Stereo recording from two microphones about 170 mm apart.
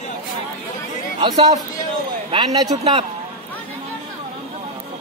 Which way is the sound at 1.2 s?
20° right (ahead or behind).